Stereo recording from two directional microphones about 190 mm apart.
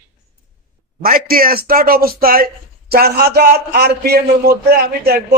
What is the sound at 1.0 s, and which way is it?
A man's voice, 50° right (ahead or behind).